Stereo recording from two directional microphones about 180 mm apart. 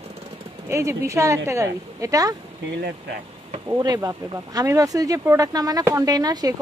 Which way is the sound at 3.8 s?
20° right (ahead or behind).